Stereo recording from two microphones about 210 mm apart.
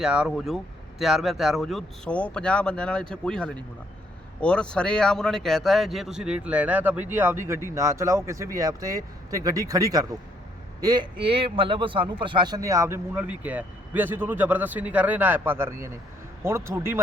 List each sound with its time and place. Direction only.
0.0 s a man's voice: 5° right (ahead or behind)